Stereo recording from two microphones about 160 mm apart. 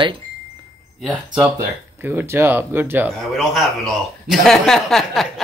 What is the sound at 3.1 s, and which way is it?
Speech, centre (ahead or behind).